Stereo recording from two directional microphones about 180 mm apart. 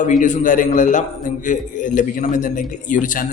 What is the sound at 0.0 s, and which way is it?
A man's voice, 45° left (ahead or behind).